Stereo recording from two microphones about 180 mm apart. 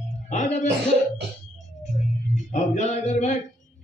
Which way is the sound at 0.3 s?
40° left (ahead or behind).